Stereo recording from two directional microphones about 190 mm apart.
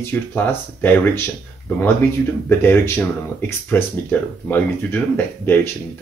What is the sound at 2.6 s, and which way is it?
Speech, 10° left (ahead or behind).